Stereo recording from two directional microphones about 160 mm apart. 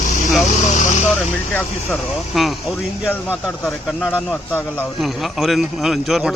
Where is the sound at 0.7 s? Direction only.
50° left (ahead or behind).